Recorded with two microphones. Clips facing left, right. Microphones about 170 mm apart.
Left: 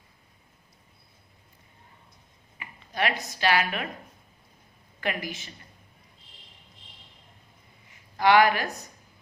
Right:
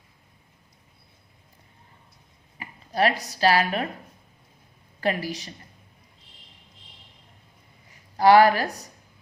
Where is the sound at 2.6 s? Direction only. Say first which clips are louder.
Right 6 dB; 35° right (ahead or behind).